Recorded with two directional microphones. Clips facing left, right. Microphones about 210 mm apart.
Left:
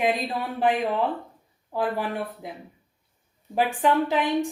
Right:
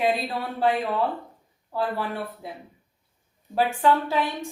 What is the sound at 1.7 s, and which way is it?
Speech, 15° left (ahead or behind).